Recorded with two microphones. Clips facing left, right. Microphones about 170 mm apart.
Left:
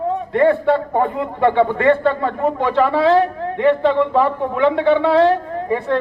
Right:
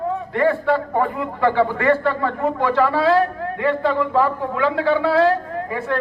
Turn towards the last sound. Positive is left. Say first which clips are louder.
# left 4 dB
turn(degrees=20)  # may be behind; listen again after turning